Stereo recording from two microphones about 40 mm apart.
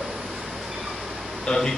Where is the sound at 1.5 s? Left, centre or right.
Left.